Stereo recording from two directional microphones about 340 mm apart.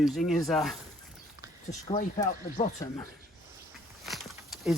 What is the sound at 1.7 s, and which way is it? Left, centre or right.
Speech, left.